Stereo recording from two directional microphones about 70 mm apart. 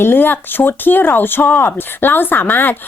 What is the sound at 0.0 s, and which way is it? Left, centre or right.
A woman's voice, left.